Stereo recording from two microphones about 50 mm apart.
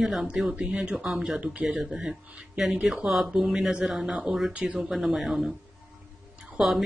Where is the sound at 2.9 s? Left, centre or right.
Centre.